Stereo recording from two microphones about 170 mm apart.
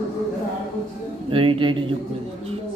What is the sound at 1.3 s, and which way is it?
Speech, 30° right (ahead or behind).